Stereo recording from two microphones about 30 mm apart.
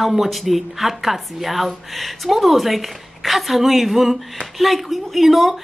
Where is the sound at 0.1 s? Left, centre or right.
Centre.